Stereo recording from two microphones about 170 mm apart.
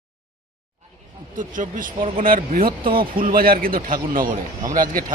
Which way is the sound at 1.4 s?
50° right (ahead or behind).